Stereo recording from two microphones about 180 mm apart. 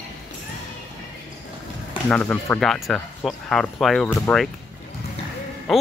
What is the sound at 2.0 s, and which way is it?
Speech, 10° left (ahead or behind).